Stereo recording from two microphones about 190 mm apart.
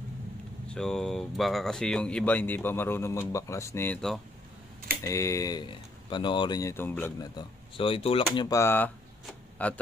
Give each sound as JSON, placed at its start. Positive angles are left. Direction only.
{"t": 0.7, "sound": "speech", "side_deg": 5}
{"t": 5.0, "sound": "speech", "side_deg": 15}
{"t": 7.3, "sound": "speech", "side_deg": 30}
{"t": 8.5, "sound": "speech", "side_deg": 15}
{"t": 9.2, "sound": "a sound", "side_deg": 10}